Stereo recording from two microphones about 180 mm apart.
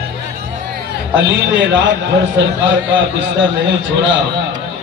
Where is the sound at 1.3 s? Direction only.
80° right.